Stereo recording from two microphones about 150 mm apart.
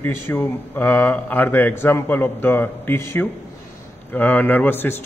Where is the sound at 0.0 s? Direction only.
15° left (ahead or behind).